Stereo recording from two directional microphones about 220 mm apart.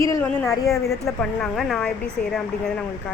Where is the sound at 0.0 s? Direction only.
15° left (ahead or behind).